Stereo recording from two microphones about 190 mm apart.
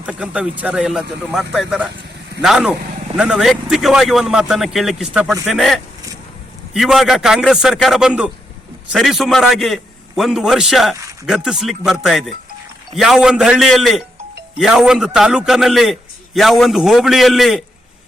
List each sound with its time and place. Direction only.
0.0 s a man's voice: 5° right (ahead or behind)